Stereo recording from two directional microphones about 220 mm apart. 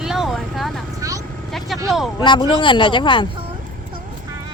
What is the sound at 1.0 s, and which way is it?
Vehicle, 15° right (ahead or behind).